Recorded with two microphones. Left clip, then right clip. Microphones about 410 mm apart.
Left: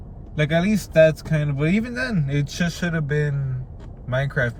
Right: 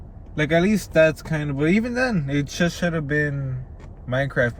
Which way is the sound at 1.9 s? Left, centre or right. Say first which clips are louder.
Right 3 dB; centre.